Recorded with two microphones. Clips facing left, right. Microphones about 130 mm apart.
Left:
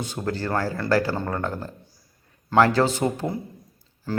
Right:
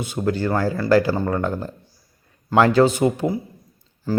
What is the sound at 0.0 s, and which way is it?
Speech, 15° right (ahead or behind).